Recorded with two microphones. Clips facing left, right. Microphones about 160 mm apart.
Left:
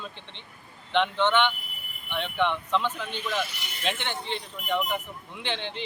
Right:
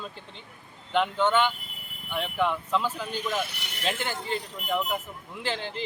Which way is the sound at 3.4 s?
65° right (ahead or behind).